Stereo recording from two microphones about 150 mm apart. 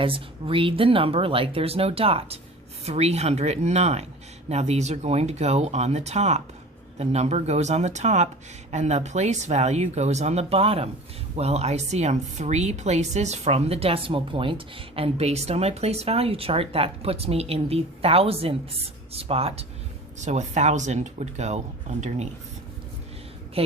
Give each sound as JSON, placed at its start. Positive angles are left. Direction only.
{"t": 0.0, "sound": "speech", "side_deg": -35}
{"t": 20.1, "sound": "speech", "side_deg": -50}
{"t": 23.6, "sound": "speech", "side_deg": -40}